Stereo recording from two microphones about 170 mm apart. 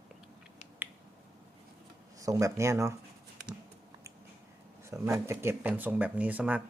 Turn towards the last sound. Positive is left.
turn(degrees=-10)  # may be behind; listen again after turning